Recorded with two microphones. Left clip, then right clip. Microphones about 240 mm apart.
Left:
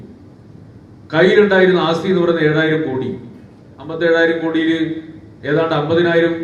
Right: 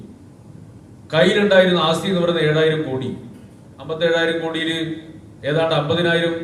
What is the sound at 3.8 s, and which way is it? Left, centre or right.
A man's voice, right.